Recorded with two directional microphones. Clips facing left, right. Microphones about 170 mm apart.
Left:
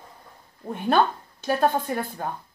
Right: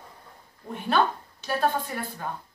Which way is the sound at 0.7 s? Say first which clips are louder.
Left 3 dB; 50° left (ahead or behind).